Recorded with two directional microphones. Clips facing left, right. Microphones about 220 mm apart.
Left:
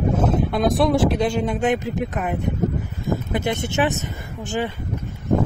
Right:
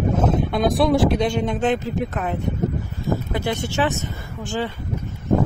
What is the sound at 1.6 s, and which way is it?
Speech, 15° left (ahead or behind).